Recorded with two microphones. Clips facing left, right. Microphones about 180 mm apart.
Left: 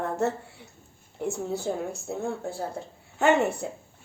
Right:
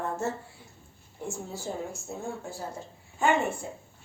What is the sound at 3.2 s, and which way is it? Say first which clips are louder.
Speech: left 4 dB; 75° left (ahead or behind).